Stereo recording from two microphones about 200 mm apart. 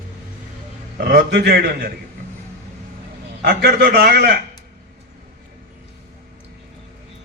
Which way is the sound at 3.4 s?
50° right (ahead or behind).